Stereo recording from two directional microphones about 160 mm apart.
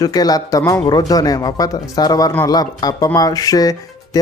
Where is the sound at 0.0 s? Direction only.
25° left (ahead or behind).